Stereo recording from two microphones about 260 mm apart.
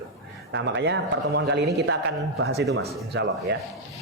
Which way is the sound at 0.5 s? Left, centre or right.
Right.